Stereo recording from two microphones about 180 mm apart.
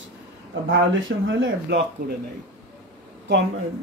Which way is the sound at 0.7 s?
85° right.